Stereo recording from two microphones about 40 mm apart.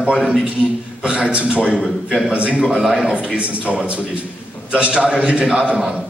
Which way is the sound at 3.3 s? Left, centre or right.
Right.